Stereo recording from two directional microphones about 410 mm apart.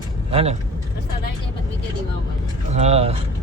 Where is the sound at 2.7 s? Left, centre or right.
Centre.